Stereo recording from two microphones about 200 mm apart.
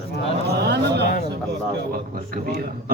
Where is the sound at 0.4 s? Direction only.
55° right (ahead or behind).